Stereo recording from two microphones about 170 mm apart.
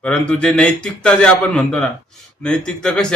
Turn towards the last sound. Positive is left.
turn(degrees=5)  # may be behind; listen again after turning